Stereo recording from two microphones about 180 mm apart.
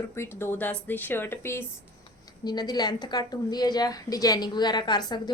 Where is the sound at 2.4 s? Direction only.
20° left (ahead or behind).